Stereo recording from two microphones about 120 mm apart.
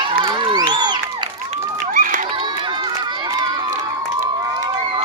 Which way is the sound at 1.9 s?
90° right.